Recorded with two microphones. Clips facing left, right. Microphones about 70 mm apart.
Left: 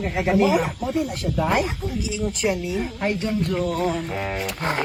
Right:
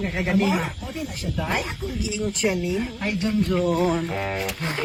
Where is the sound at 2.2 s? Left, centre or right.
Centre.